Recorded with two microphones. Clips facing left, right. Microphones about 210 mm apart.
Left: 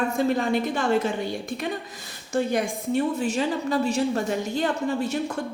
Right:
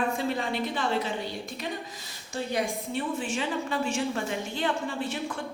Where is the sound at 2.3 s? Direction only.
45° left (ahead or behind).